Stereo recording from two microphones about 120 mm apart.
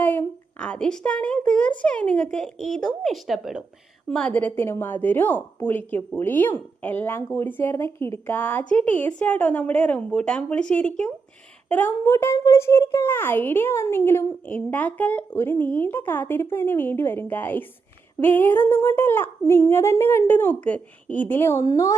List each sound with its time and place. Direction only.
0.0 s a child's voice: 15° left (ahead or behind); by 3.6 s centre (ahead or behind)
4.1 s a child's voice: 10° left (ahead or behind); by 21.9 s 25° left (ahead or behind)